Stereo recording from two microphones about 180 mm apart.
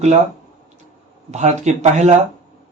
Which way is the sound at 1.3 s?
40° right (ahead or behind).